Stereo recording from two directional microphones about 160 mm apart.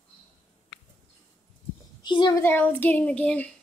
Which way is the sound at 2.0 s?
30° left (ahead or behind).